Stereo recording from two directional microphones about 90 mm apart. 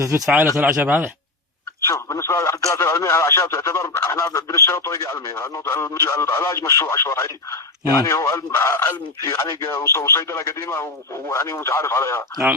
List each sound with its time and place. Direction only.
0.6 s speech: 20° right (ahead or behind)
1.9 s speech: 30° left (ahead or behind)
9.2 s speech: 40° left (ahead or behind)